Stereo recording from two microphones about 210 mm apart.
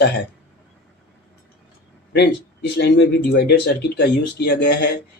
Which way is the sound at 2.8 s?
55° left (ahead or behind).